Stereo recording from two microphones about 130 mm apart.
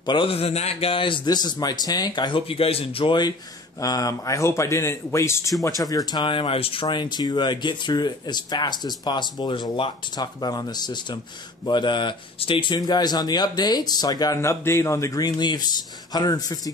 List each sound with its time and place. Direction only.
0.0 s speech: 40° left (ahead or behind)
12.7 s speech: 30° left (ahead or behind)